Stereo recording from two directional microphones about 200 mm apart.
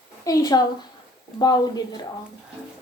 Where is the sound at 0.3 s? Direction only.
20° left (ahead or behind).